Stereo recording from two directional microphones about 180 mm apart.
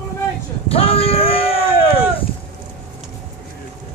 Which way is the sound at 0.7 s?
30° left (ahead or behind).